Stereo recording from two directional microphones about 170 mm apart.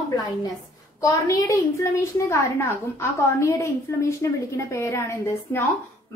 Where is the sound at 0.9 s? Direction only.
20° left (ahead or behind).